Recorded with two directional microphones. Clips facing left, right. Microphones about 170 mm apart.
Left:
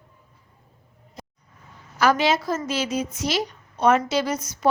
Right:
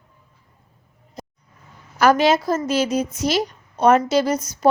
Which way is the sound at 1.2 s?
40° right (ahead or behind).